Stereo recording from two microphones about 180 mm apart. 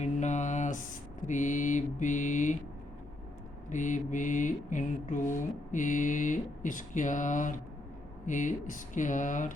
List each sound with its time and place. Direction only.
0.0 s mantra: 40° left (ahead or behind)
3.7 s mantra: 45° left (ahead or behind)